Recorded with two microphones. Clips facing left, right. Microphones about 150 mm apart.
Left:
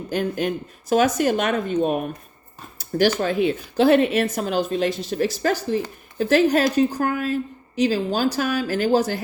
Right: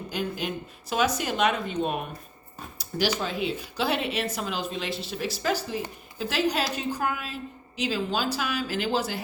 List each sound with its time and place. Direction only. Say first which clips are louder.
0.1 s speech: left 8 dB; 50° left (ahead or behind)